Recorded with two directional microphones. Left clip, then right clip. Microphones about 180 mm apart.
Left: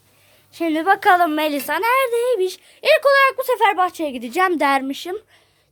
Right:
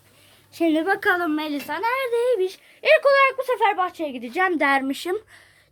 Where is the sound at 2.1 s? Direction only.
25° left (ahead or behind).